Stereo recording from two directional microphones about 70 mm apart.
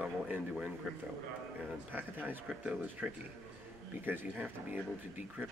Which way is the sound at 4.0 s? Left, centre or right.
Right.